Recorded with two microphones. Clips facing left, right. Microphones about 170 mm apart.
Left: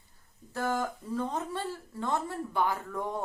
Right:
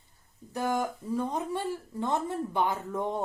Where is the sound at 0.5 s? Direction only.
15° right (ahead or behind).